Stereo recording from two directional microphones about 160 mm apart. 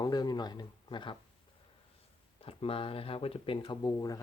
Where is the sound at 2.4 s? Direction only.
35° left (ahead or behind).